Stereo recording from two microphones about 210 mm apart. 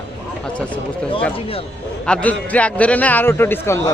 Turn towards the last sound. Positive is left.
turn(degrees=10)  # may be behind; listen again after turning